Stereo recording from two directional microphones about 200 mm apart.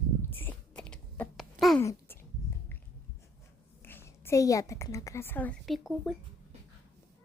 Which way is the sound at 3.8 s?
10° left (ahead or behind).